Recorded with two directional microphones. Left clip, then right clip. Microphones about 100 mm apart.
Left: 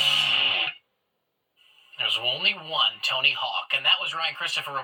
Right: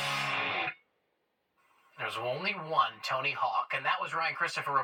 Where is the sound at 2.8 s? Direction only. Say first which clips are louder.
Left 3 dB; 10° left (ahead or behind).